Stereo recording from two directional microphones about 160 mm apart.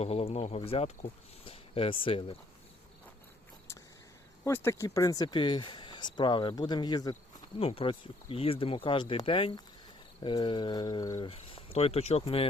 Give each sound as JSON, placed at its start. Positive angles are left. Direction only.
{"t": 0.0, "sound": "speech", "side_deg": 40}
{"t": 4.4, "sound": "speech", "side_deg": 15}
{"t": 7.6, "sound": "speech", "side_deg": 35}
{"t": 11.2, "sound": "speech", "side_deg": 35}